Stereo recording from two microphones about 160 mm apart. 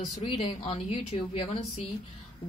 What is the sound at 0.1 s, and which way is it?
Speech, 40° left (ahead or behind).